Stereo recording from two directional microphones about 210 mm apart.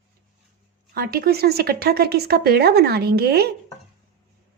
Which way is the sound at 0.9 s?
45° right (ahead or behind).